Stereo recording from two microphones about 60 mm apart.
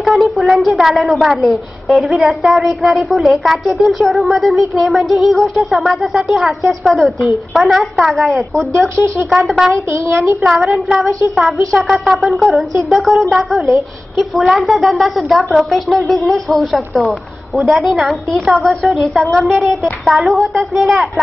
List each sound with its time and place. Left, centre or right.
0.0 s a woman's voice: centre
8.7 s speech: right
9.3 s a woman's voice: centre
10.0 s speech: right
10.4 s a woman's voice: centre